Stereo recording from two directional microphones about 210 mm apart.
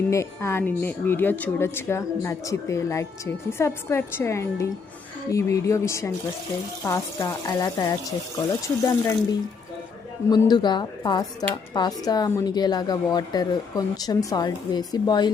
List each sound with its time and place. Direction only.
0.1 s a woman's voice: 15° left (ahead or behind)
10.2 s speech: 20° left (ahead or behind)